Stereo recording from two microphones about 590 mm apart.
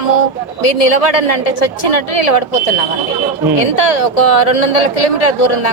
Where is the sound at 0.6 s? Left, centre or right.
Left.